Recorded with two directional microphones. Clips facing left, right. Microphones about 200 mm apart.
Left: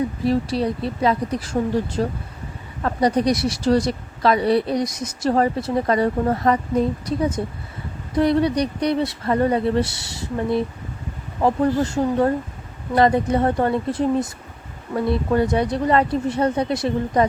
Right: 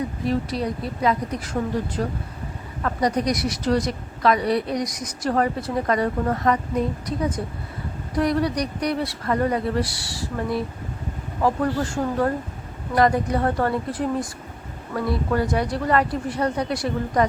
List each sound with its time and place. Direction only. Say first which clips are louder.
0.3 s speech: left 3 dB; 30° left (ahead or behind)
8.1 s speech: left 4 dB; 25° left (ahead or behind)